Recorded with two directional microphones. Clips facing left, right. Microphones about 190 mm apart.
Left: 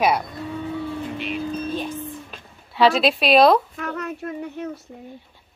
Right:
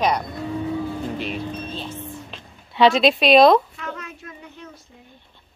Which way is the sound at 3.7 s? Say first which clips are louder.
Left 5 dB; 60° left (ahead or behind).